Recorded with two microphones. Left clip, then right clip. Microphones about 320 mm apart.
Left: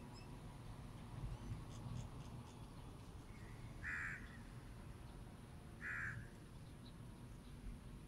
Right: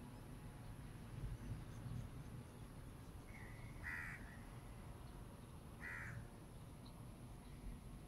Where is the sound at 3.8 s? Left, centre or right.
Centre.